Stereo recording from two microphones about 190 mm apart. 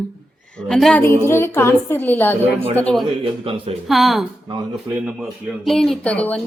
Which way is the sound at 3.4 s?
30° right (ahead or behind).